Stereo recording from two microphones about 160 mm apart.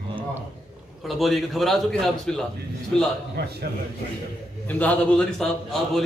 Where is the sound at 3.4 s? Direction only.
90° right.